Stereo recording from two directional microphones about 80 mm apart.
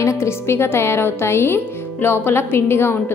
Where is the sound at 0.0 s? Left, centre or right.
Left.